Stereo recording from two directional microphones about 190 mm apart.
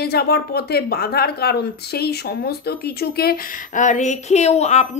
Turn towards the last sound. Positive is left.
turn(degrees=35)  # may be behind; listen again after turning